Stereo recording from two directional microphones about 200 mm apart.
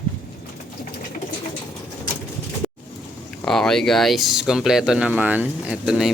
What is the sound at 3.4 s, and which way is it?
Speech, centre (ahead or behind).